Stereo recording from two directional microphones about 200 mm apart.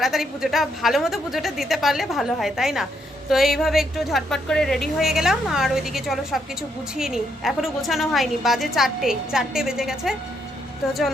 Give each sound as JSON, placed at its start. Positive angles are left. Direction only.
{"t": 0.0, "sound": "a woman's voice", "side_deg": 0}